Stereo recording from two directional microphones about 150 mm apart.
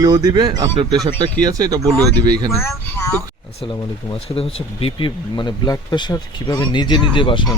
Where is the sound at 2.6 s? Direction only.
15° left (ahead or behind).